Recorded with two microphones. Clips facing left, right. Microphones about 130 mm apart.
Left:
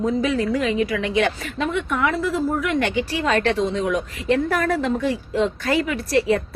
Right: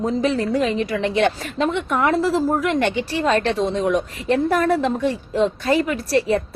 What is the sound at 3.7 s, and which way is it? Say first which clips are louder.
Speech: right 2 dB; 40° right (ahead or behind).